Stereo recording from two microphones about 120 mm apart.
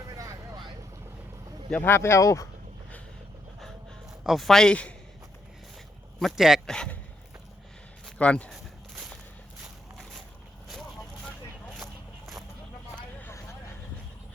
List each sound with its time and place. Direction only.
0.0 s vehicle: 30° right (ahead or behind)
1.7 s speech: 15° left (ahead or behind)
4.2 s a man's voice: centre (ahead or behind)
6.1 s a man's voice: centre (ahead or behind)
6.7 s speech: 10° left (ahead or behind)
8.0 s speech: 10° left (ahead or behind)
8.5 s a sound: 5° right (ahead or behind)
10.7 s vehicle: 5° left (ahead or behind)
11.8 s a sound: centre (ahead or behind)
13.0 s vehicle: 15° left (ahead or behind)
13.3 s vehicle: 25° left (ahead or behind)